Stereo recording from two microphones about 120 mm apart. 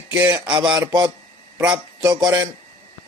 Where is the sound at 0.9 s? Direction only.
35° right (ahead or behind).